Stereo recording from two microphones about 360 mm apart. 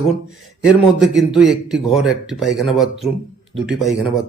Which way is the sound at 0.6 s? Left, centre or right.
Centre.